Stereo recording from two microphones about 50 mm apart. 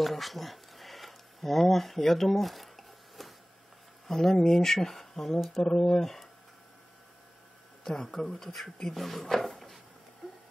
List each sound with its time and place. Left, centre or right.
0.0 s a sound: centre
4.1 s speech: centre
7.8 s speech: centre